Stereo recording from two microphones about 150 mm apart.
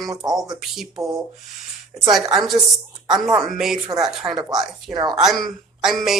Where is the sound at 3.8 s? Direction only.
25° right (ahead or behind).